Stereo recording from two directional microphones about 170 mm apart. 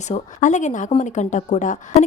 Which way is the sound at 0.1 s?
45° left (ahead or behind).